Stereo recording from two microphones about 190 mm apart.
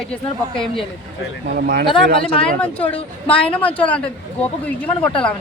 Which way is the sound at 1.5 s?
55° right (ahead or behind).